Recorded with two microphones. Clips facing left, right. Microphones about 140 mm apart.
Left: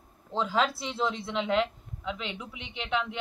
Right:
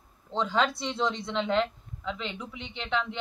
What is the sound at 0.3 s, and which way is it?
Speech, 5° left (ahead or behind).